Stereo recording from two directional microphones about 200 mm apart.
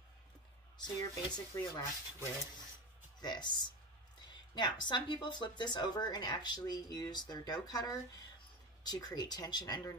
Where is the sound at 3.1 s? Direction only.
20° left (ahead or behind).